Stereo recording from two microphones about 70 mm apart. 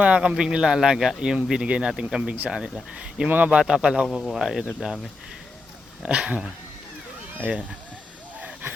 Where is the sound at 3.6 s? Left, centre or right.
Centre.